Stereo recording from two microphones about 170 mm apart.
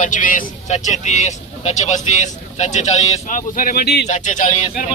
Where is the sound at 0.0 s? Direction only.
50° left (ahead or behind); by 4.0 s 65° left (ahead or behind).